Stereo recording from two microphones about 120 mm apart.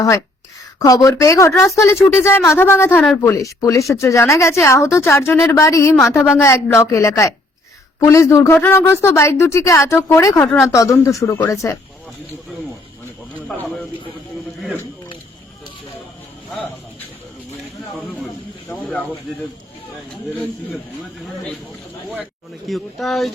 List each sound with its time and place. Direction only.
0.8 s speech: 30° left (ahead or behind)
18.7 s snake: 10° left (ahead or behind)
22.1 s speech: centre (ahead or behind)